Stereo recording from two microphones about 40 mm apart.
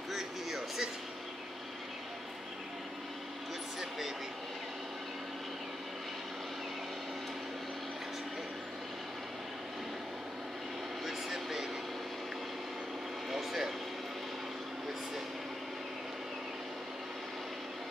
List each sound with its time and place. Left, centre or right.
0.1 s a sound: centre
11.1 s vehicle: centre
13.3 s vehicle: centre